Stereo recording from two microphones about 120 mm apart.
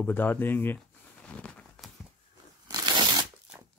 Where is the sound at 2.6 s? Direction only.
35° right (ahead or behind).